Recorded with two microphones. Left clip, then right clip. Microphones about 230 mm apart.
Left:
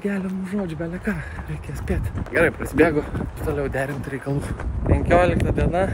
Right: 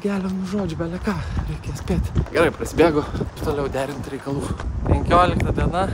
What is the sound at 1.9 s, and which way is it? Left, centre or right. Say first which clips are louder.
Speech: right 2 dB; centre.